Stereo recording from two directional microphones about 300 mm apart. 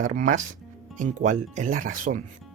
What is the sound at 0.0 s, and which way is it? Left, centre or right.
Speech, right.